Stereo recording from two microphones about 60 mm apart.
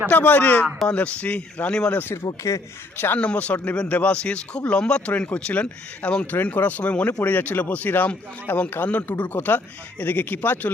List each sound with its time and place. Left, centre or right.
0.1 s speech: left
2.2 s speech: left
3.2 s speech: left
6.3 s speech: left
7.1 s speech: left